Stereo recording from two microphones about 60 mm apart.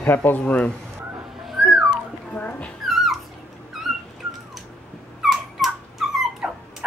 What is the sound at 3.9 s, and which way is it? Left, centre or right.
Whistling, centre.